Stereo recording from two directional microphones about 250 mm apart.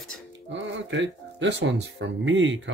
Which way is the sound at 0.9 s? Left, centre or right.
Right.